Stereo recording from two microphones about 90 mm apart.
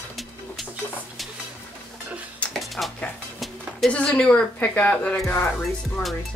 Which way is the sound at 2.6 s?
Centre (ahead or behind).